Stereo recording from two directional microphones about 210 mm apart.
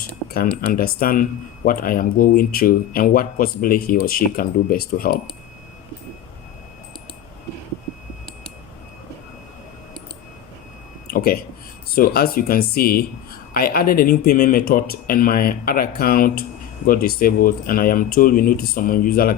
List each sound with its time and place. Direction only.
0.3 s speech: 45° left (ahead or behind)
11.1 s a sound: 45° left (ahead or behind)
11.9 s speech: 45° left (ahead or behind)